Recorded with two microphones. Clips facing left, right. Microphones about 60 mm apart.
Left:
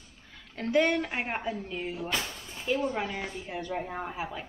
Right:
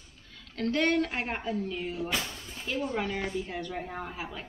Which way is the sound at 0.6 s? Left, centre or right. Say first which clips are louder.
Left 1 dB; centre.